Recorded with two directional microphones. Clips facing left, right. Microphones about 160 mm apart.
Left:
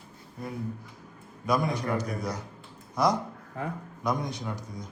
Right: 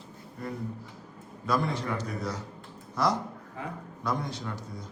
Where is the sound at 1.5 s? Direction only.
15° left (ahead or behind).